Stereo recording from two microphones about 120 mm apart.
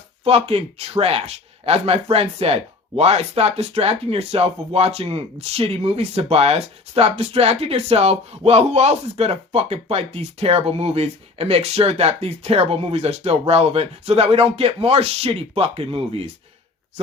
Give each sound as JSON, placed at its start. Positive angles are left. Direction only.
{"t": 0.3, "sound": "speech", "side_deg": -55}